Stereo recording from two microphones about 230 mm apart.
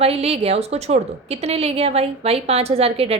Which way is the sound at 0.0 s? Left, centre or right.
Right.